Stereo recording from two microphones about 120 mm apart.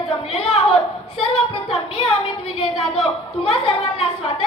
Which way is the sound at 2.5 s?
60° left (ahead or behind).